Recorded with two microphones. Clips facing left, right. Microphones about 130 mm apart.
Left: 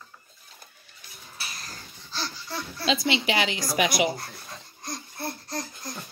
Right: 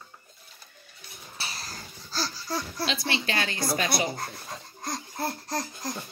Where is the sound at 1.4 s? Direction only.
35° right (ahead or behind).